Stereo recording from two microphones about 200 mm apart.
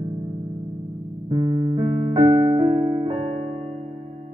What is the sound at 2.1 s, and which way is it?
Electric piano, 25° right (ahead or behind).